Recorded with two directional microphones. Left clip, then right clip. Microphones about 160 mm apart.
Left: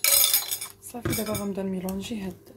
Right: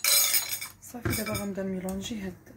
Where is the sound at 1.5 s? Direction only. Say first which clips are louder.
Left 2 dB; 25° left (ahead or behind).